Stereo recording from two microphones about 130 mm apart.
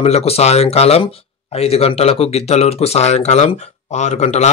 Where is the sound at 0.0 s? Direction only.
50° left (ahead or behind).